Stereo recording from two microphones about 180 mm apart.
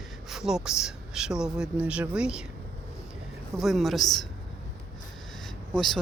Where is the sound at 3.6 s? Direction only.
Centre (ahead or behind).